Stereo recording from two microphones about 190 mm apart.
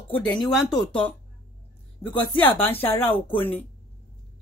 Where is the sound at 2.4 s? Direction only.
10° left (ahead or behind).